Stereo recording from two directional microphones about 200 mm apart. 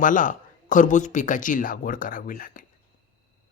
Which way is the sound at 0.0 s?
40° left (ahead or behind).